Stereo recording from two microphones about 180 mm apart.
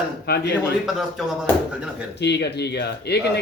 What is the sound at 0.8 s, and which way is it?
Speech, centre (ahead or behind).